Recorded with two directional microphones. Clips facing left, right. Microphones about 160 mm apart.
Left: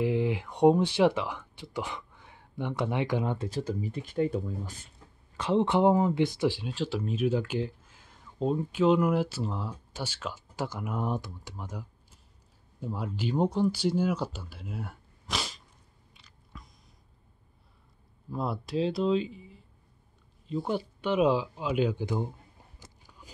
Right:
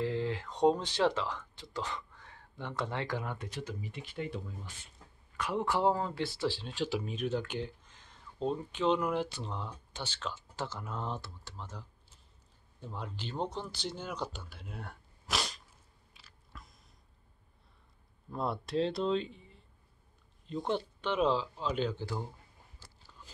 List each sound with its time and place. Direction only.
0.0 s speech: 15° left (ahead or behind); by 4.8 s 40° left (ahead or behind)
5.4 s speech: 25° left (ahead or behind)
6.7 s speech: centre (ahead or behind)
16.1 s biting: centre (ahead or behind)
18.3 s speech: centre (ahead or behind); by 22.3 s 20° left (ahead or behind)
22.8 s biting: 15° left (ahead or behind)